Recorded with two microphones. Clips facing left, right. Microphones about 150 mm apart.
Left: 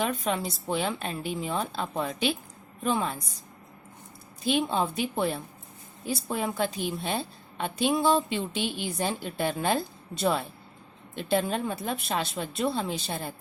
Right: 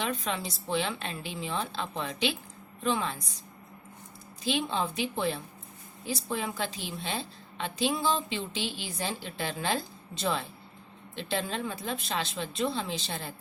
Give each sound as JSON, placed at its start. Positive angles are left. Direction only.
{"t": 0.0, "sound": "a woman's voice", "side_deg": 45}
{"t": 4.4, "sound": "a woman's voice", "side_deg": 50}